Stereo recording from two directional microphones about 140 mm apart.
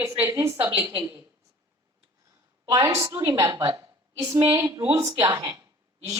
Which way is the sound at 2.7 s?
20° right (ahead or behind).